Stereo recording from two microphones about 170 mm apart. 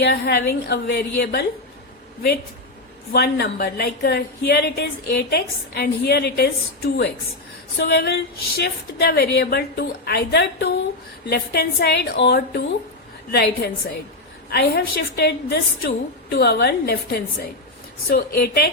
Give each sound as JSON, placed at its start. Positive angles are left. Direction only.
{"t": 0.0, "sound": "a woman's voice", "side_deg": 70}
{"t": 3.1, "sound": "a woman's voice", "side_deg": 75}
{"t": 8.0, "sound": "a woman's voice", "side_deg": 70}